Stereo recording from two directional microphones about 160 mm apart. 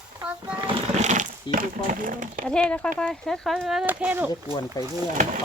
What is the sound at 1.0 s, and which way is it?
Speech, 50° right (ahead or behind).